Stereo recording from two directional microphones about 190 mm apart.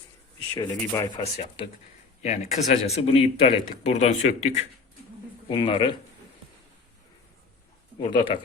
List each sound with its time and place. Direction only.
0.5 s speech: 20° left (ahead or behind)
8.0 s speech: 25° left (ahead or behind)